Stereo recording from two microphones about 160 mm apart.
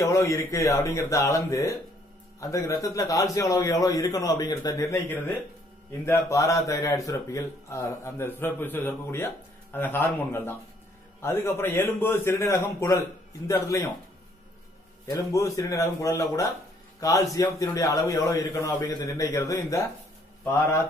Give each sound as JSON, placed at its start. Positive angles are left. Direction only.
{"t": 0.0, "sound": "a man's voice", "side_deg": 20}
{"t": 15.0, "sound": "a man's voice", "side_deg": 20}